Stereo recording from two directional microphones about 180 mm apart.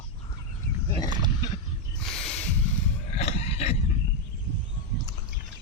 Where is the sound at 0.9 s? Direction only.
20° left (ahead or behind).